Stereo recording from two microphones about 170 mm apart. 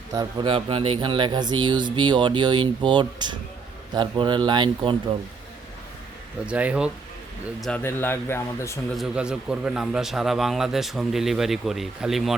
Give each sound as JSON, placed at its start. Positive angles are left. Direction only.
{"t": 0.1, "sound": "speech", "side_deg": -25}
{"t": 6.4, "sound": "speech", "side_deg": -5}
{"t": 7.6, "sound": "speech", "side_deg": 10}
{"t": 8.9, "sound": "a man's voice", "side_deg": -5}